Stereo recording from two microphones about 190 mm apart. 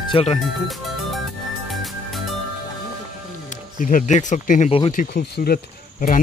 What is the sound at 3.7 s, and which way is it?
Speech, 45° left (ahead or behind).